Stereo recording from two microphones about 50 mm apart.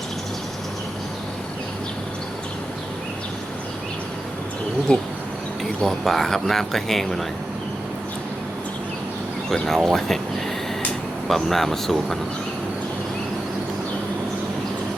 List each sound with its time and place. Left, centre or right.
4.9 s speech: centre
5.8 s speech: centre
9.5 s speech: centre
11.3 s speech: centre